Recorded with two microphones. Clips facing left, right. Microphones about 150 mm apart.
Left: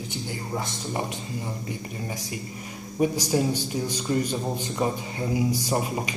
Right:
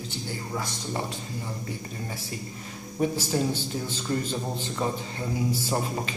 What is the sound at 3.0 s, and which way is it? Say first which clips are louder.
A man's voice: left 3 dB; 15° left (ahead or behind).